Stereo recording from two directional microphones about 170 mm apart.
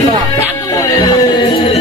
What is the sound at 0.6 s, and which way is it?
Music, 20° left (ahead or behind).